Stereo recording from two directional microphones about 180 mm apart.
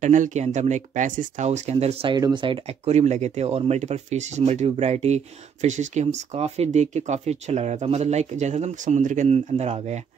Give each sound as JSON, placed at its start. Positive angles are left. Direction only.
{"t": 0.0, "sound": "speech", "side_deg": -45}